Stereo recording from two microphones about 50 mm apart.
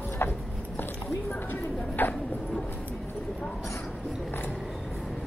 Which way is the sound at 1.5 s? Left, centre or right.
Left.